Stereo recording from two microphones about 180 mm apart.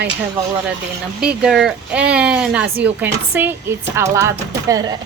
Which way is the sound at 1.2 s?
5° right (ahead or behind).